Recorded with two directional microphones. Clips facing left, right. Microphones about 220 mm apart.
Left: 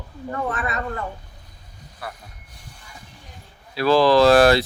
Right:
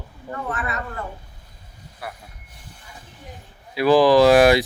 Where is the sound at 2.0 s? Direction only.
10° right (ahead or behind).